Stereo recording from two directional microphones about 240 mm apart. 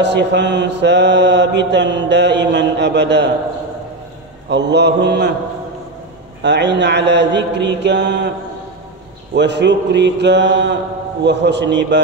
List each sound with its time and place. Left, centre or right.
0.0 s mantra: right
4.5 s mantra: right
6.4 s mantra: right
9.3 s mantra: right